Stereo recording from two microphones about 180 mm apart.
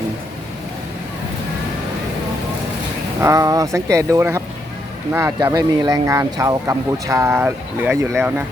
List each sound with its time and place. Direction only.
3.2 s speech: 15° right (ahead or behind)